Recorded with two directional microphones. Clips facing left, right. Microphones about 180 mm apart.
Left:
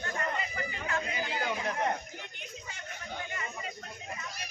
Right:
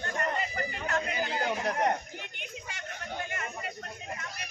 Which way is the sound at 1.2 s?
45° right (ahead or behind).